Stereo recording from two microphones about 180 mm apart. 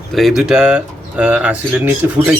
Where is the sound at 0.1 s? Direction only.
Centre (ahead or behind).